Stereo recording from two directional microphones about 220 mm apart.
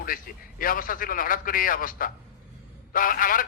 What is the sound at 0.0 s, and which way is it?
A man's voice, 40° left (ahead or behind).